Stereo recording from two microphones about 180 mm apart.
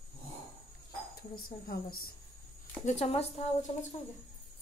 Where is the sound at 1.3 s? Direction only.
55° left (ahead or behind).